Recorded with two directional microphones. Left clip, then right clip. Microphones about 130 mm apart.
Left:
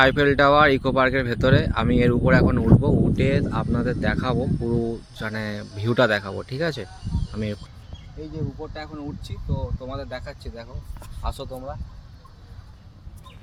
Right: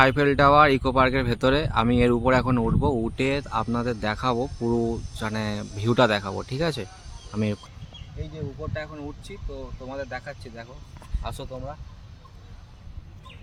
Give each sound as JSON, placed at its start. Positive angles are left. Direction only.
{"t": 0.0, "sound": "speech", "side_deg": -5}
{"t": 5.1, "sound": "speech", "side_deg": -20}
{"t": 7.3, "sound": "speech", "side_deg": -30}
{"t": 9.9, "sound": "speech", "side_deg": 20}
{"t": 11.2, "sound": "speech", "side_deg": -5}